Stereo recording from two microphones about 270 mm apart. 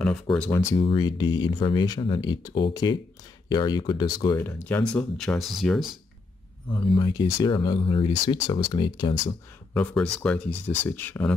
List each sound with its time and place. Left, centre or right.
0.0 s speech: centre
6.7 s speech: centre
9.8 s speech: centre